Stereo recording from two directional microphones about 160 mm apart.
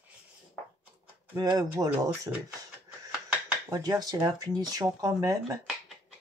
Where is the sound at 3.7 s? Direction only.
25° right (ahead or behind).